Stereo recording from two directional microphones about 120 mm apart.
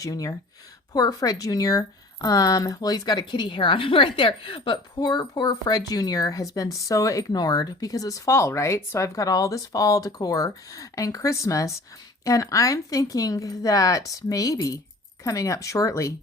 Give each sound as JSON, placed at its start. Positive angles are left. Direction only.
{"t": 0.0, "sound": "a woman's voice", "side_deg": 30}